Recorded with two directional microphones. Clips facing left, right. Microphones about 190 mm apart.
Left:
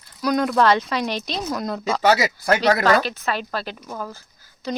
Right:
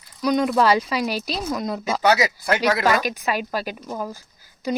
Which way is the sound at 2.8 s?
10° right (ahead or behind).